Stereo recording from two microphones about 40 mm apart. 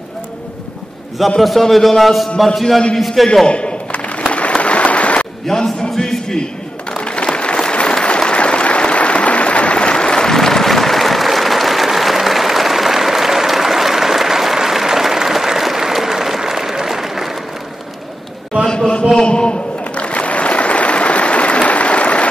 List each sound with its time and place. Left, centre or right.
1.4 s a man's voice: centre
3.4 s a sound: left
4.3 s applause: left
5.5 s a sound: centre
7.1 s applause: left; by 17.3 s centre
19.2 s applause: left